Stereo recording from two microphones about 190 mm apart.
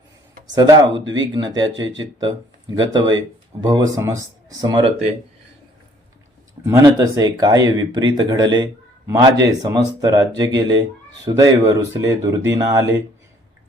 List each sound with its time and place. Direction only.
0.5 s speech: 20° right (ahead or behind)
0.9 s speech: 75° right (ahead or behind)
1.3 s speech: 20° right (ahead or behind)
6.7 s speech: 15° right (ahead or behind)